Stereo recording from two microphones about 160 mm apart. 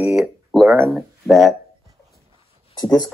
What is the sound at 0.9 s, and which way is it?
Speech, centre (ahead or behind).